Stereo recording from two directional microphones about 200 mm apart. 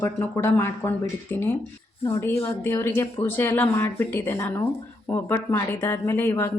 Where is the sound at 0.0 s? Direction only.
10° left (ahead or behind).